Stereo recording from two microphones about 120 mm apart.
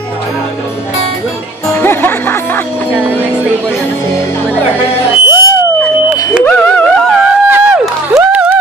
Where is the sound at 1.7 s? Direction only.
15° left (ahead or behind).